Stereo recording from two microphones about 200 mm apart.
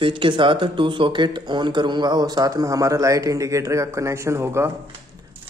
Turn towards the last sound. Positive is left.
turn(degrees=-15)  # may be behind; listen again after turning